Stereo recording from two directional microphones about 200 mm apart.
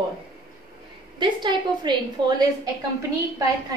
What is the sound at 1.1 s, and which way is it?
A woman's voice, 25° right (ahead or behind).